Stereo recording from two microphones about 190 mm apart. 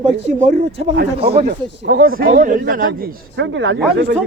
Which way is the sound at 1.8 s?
60° right (ahead or behind).